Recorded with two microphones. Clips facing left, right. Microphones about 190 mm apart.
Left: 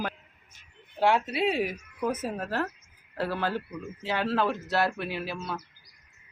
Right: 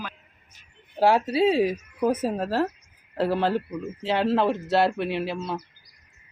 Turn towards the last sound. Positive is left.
turn(degrees=-25)  # may be behind; listen again after turning